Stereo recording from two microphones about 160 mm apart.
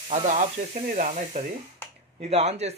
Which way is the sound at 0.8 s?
50° right (ahead or behind).